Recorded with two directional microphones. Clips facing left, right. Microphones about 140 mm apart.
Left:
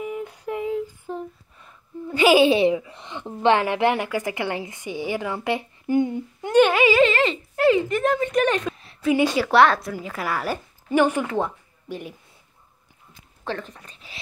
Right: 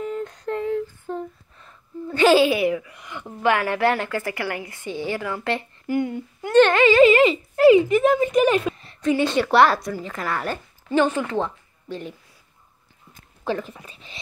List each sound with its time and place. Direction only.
0.0 s a sound: 10° left (ahead or behind)
2.4 s a woman's voice: 25° left (ahead or behind)
7.0 s speech: 10° right (ahead or behind)
7.6 s a woman's voice: 5° left (ahead or behind)
9.5 s a woman's voice: centre (ahead or behind)
13.4 s speech: 5° right (ahead or behind)